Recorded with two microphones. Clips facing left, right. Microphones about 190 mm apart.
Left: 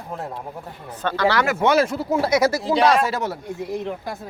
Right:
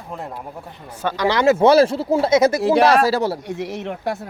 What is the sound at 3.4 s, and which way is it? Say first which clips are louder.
Speech: right 1 dB; 80° right.